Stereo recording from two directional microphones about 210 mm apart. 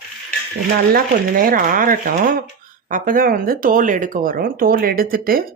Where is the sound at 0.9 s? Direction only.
45° right (ahead or behind).